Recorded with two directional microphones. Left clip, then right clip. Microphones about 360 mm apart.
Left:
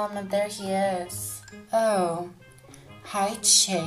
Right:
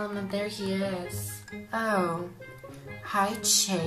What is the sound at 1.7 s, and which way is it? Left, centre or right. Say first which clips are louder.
A woman's voice: left 5 dB; centre.